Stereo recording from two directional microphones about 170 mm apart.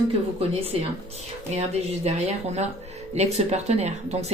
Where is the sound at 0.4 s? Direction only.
35° right (ahead or behind).